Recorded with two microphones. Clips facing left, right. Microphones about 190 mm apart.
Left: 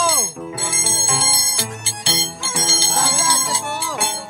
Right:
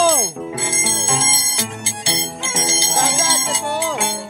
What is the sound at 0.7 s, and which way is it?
Music, 20° right (ahead or behind).